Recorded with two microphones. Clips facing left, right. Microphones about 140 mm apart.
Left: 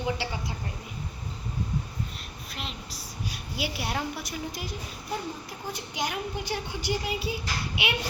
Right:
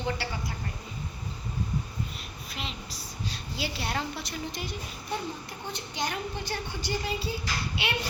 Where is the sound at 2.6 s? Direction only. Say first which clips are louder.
Even; centre (ahead or behind).